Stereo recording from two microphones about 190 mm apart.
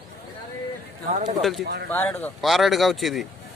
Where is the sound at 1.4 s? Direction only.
Centre (ahead or behind).